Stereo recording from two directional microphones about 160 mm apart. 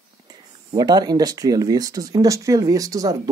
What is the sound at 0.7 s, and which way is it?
Speech, 25° right (ahead or behind).